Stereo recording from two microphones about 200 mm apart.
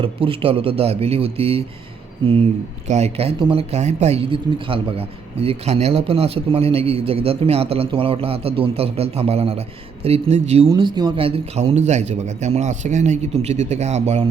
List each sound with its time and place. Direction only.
0.3 s speech: 30° right (ahead or behind)
10.7 s a man's voice: 20° right (ahead or behind)